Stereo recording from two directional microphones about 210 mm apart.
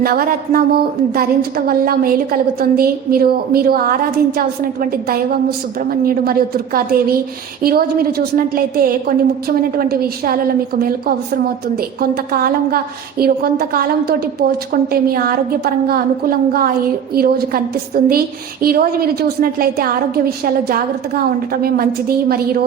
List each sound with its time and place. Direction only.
0.0 s a woman's voice: 45° right (ahead or behind)